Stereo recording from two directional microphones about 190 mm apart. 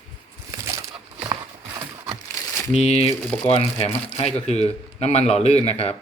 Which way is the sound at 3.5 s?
30° left (ahead or behind).